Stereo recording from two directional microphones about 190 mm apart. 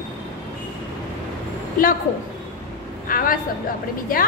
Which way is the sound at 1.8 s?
45° left (ahead or behind).